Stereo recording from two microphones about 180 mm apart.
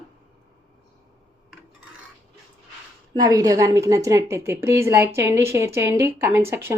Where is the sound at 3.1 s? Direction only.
20° right (ahead or behind).